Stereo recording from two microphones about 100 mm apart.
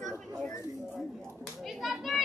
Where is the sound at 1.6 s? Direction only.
Centre (ahead or behind).